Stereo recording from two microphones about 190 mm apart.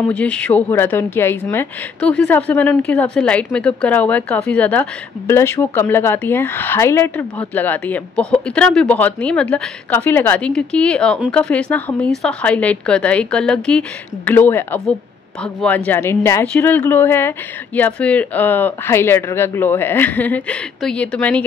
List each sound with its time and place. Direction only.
0.1 s a woman's voice: 5° left (ahead or behind)